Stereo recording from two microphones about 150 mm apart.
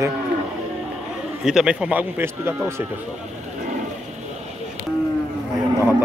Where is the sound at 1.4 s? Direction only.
5° right (ahead or behind).